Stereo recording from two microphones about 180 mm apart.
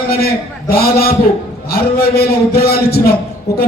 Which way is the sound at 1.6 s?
60° left (ahead or behind).